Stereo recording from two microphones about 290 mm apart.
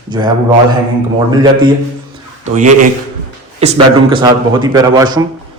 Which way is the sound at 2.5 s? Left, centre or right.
Right.